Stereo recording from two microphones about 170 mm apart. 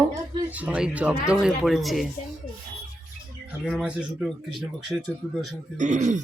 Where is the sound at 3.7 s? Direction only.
5° right (ahead or behind).